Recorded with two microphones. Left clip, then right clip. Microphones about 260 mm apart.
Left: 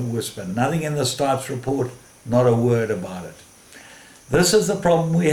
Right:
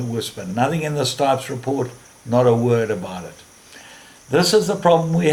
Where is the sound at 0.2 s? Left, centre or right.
Centre.